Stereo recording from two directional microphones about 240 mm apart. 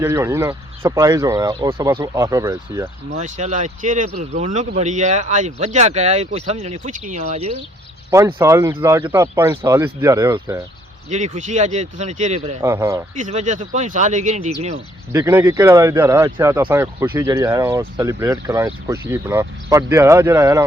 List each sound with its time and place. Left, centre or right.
0.0 s speech: centre
3.2 s speech: right
8.1 s speech: centre
11.1 s speech: right
12.6 s speech: centre
13.1 s speech: right
15.1 s speech: centre